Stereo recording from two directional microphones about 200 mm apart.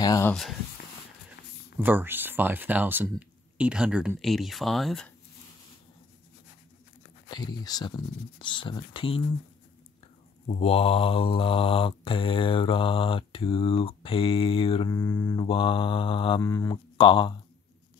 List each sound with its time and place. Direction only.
0.0 s a sound: 20° left (ahead or behind)
0.3 s speech: centre (ahead or behind)
1.8 s speech: 10° right (ahead or behind)
7.2 s mantra: 20° left (ahead or behind)
10.5 s mantra: 30° left (ahead or behind)